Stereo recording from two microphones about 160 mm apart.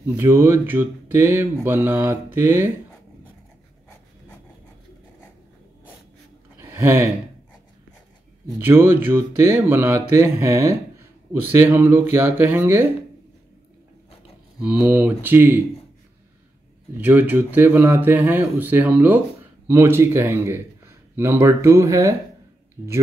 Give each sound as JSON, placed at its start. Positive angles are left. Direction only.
{"t": 0.0, "sound": "speech", "side_deg": -15}
{"t": 6.5, "sound": "a sound", "side_deg": -15}
{"t": 8.5, "sound": "speech", "side_deg": -15}
{"t": 14.6, "sound": "speech", "side_deg": -10}
{"t": 16.9, "sound": "speech", "side_deg": -10}